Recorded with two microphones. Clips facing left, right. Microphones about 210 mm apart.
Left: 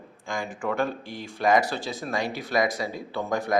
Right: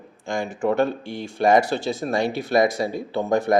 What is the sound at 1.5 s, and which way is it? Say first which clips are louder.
Speech: right 4 dB; 25° right (ahead or behind).